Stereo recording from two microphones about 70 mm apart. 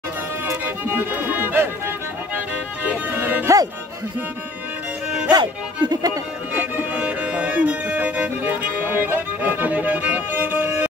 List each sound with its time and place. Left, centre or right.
0.5 s music: right
5.3 s speech: right
6.5 s music: right